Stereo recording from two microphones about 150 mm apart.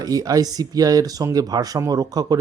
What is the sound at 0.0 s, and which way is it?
Speech, 25° right (ahead or behind).